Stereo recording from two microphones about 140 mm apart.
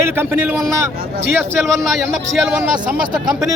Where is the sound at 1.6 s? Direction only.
Centre (ahead or behind).